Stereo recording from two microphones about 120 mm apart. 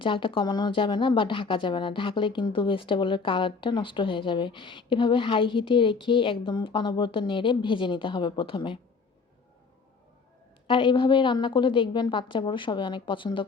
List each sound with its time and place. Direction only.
0.0 s speech: 45° left (ahead or behind)
10.7 s speech: 45° left (ahead or behind)